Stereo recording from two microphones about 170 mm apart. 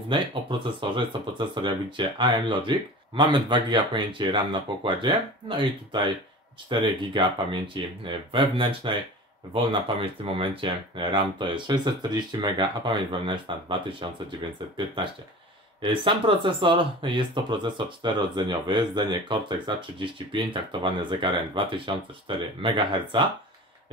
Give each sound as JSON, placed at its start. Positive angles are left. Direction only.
{"t": 0.1, "sound": "speech", "side_deg": -30}
{"t": 15.8, "sound": "speech", "side_deg": -30}